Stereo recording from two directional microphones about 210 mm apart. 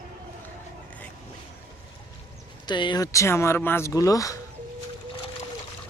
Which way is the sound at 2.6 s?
20° left (ahead or behind).